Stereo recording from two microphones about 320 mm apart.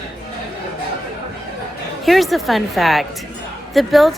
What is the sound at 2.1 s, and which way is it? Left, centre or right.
A woman's voice, centre.